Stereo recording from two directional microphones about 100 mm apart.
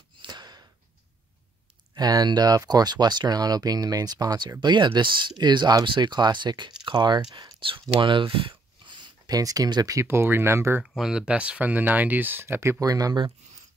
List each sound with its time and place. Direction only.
0.2 s a sound: 45° right (ahead or behind)
2.0 s speech: 40° right (ahead or behind)
10.0 s speech: 25° right (ahead or behind)
10.8 s speech: 5° right (ahead or behind); by 12.9 s 25° right (ahead or behind)
12.9 s speech: 40° right (ahead or behind)